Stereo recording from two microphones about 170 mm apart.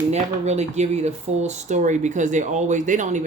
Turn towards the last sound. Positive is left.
turn(degrees=-45)  # may be behind; listen again after turning